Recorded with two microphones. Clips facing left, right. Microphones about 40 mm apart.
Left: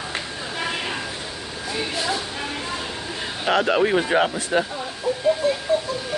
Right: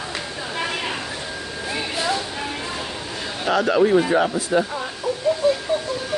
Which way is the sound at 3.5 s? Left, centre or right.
Left.